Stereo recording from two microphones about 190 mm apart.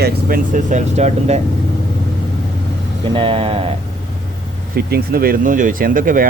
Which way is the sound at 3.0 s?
25° right (ahead or behind).